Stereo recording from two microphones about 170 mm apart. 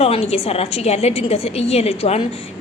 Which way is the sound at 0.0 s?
35° left (ahead or behind).